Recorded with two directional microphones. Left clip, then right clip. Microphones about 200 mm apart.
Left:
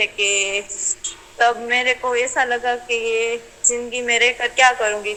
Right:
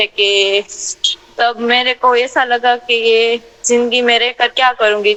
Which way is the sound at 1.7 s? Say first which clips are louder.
Right 5 dB; 60° right (ahead or behind).